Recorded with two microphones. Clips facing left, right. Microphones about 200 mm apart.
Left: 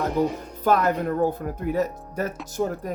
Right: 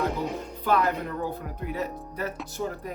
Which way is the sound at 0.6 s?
45° left (ahead or behind).